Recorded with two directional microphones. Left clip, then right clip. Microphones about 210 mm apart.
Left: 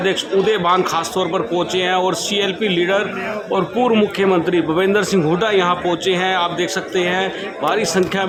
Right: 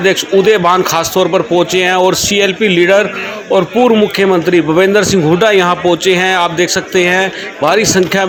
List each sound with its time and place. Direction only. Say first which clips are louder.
0.0 s speech: right 7 dB; 15° right (ahead or behind)